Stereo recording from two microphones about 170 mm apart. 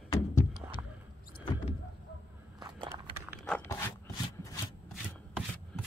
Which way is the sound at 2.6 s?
25° right (ahead or behind).